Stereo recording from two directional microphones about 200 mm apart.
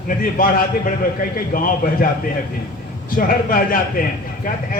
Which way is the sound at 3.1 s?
45° left (ahead or behind).